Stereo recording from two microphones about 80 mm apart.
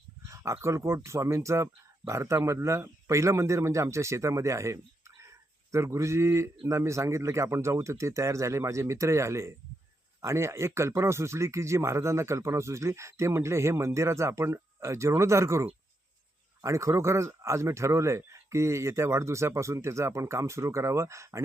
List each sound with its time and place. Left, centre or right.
0.3 s speech: right